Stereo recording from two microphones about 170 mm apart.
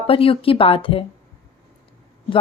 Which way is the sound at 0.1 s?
30° left (ahead or behind).